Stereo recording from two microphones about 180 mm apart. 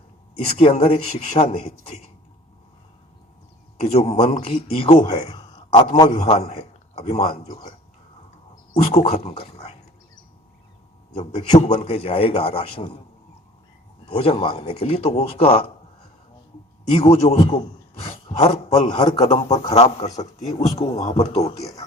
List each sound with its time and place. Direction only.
0.5 s a man's voice: 35° left (ahead or behind)
3.8 s a man's voice: 35° left (ahead or behind)
8.9 s speech: 35° left (ahead or behind)
11.1 s a man's voice: 25° left (ahead or behind)
14.1 s a man's voice: 30° left (ahead or behind)
17.0 s a man's voice: 30° left (ahead or behind)
19.2 s a man's voice: 35° left (ahead or behind)